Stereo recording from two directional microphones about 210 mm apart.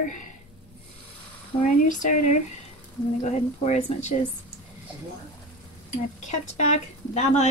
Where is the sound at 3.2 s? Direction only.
35° left (ahead or behind).